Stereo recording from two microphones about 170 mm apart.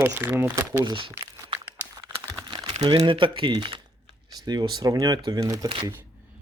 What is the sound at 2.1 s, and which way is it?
Typing, 30° right (ahead or behind).